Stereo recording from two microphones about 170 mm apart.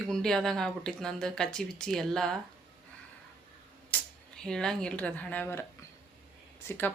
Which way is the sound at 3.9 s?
10° left (ahead or behind).